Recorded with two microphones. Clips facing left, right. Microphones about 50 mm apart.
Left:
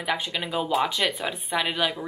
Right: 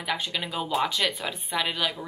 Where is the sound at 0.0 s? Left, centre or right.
Centre.